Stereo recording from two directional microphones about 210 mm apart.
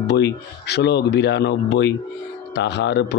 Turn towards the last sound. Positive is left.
turn(degrees=55)  # may be behind; listen again after turning